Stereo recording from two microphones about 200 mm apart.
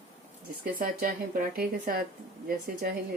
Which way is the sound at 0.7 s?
45° right (ahead or behind).